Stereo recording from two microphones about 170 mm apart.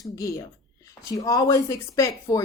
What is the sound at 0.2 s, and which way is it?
Speech, 20° left (ahead or behind).